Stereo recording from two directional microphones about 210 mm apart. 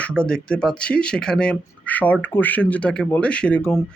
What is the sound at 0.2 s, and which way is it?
Speech, 5° left (ahead or behind).